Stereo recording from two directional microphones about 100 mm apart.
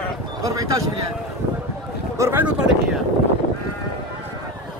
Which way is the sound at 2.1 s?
30° right (ahead or behind).